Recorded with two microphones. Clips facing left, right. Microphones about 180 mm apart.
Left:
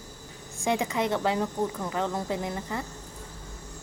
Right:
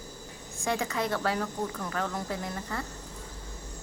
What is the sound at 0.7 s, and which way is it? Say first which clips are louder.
Speech: left 3 dB; 20° left (ahead or behind).